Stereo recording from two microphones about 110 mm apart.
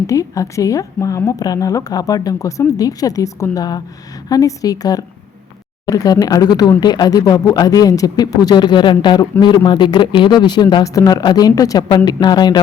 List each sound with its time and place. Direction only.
0.1 s speech: 30° left (ahead or behind)
10.8 s speech: 30° left (ahead or behind)